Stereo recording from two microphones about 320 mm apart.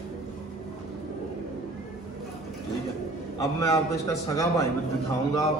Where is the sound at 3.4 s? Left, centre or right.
Centre.